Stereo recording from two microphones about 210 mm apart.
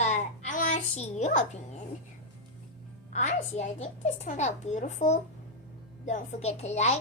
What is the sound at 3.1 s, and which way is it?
A woman's voice, 35° left (ahead or behind).